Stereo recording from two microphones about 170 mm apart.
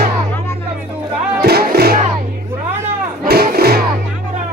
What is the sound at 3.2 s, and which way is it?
Music, 65° right (ahead or behind).